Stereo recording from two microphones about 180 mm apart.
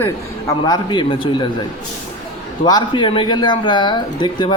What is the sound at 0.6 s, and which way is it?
Speech, 25° left (ahead or behind).